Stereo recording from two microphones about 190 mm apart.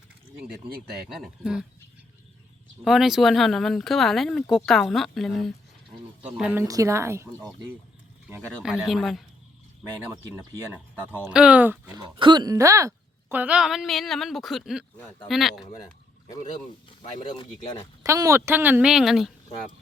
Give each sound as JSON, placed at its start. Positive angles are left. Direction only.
{"t": 1.0, "sound": "speech", "side_deg": 0}
{"t": 2.8, "sound": "speech", "side_deg": 0}
{"t": 10.9, "sound": "speech", "side_deg": -10}
{"t": 11.9, "sound": "speech", "side_deg": -25}
{"t": 17.0, "sound": "speech", "side_deg": 25}
{"t": 18.0, "sound": "speech", "side_deg": -15}